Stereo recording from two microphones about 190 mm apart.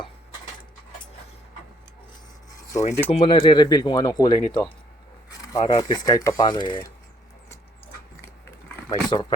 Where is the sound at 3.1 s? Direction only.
30° left (ahead or behind).